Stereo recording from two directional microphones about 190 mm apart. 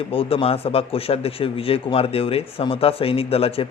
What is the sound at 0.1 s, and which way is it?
Speech, 30° left (ahead or behind).